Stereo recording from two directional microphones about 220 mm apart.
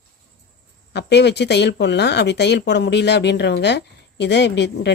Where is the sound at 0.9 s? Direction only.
50° left (ahead or behind).